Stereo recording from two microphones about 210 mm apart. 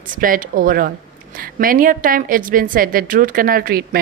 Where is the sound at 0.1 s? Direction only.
40° right (ahead or behind).